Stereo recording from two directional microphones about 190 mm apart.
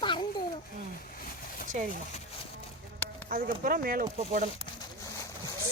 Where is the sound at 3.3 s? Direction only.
50° right (ahead or behind).